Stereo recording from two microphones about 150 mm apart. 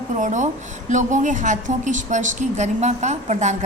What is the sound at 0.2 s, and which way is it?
A woman's voice, 55° right (ahead or behind).